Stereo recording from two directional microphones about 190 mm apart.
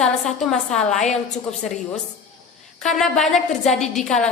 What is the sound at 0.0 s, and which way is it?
A woman's voice, 5° left (ahead or behind).